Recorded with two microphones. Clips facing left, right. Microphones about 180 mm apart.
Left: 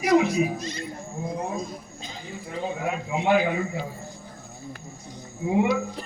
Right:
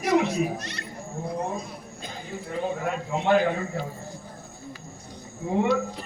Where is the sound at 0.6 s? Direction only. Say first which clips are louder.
Left 4 dB; 70° right (ahead or behind).